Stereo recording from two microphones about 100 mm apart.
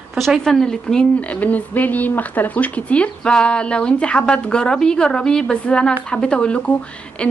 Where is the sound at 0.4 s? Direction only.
5° left (ahead or behind).